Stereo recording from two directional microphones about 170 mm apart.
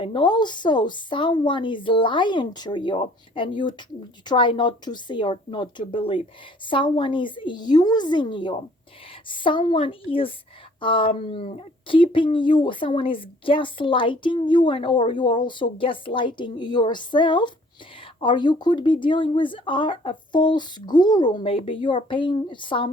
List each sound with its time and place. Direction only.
0.0 s speech: 30° left (ahead or behind)